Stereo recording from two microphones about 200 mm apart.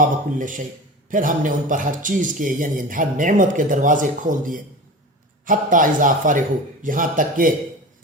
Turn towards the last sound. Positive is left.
turn(degrees=-40)  # may be behind; listen again after turning